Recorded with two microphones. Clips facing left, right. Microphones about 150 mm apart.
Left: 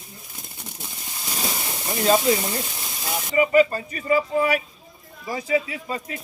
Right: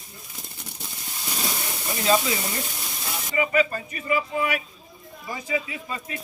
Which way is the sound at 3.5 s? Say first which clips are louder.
Left 5 dB; 35° left (ahead or behind).